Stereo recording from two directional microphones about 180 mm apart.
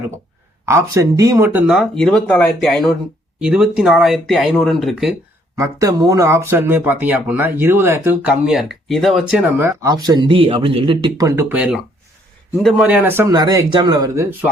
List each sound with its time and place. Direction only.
0.6 s speech: 15° right (ahead or behind)
5.5 s speech: 20° right (ahead or behind); by 9.4 s centre (ahead or behind)
9.6 s speech: 15° right (ahead or behind)